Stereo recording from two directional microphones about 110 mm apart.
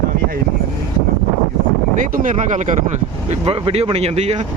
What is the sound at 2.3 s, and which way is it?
Speech, 90° right.